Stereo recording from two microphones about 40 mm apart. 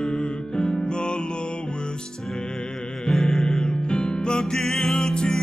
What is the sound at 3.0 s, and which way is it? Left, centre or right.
Music, centre.